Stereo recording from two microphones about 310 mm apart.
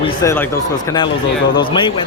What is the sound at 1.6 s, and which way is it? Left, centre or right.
Speech, centre.